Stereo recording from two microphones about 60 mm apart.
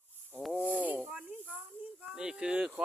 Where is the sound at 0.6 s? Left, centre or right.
Left.